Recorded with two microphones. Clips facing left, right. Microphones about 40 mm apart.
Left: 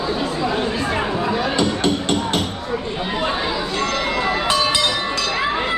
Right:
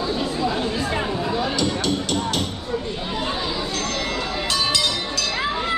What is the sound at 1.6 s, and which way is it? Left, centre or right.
Music, left.